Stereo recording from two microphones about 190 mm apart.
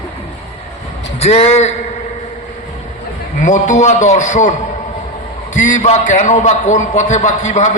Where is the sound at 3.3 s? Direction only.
40° left (ahead or behind).